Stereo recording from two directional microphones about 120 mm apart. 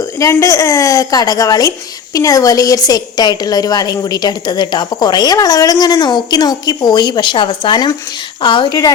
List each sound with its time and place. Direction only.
0.0 s a woman's voice: 25° left (ahead or behind); by 8.9 s 40° left (ahead or behind)